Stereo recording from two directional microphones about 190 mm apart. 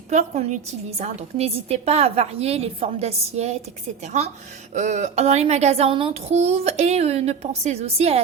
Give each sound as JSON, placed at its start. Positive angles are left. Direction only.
{"t": 0.1, "sound": "a woman's voice", "side_deg": -40}